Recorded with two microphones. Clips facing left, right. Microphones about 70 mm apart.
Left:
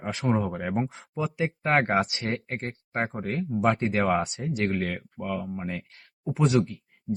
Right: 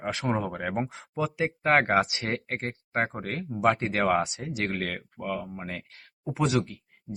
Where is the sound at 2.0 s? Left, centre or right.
Right.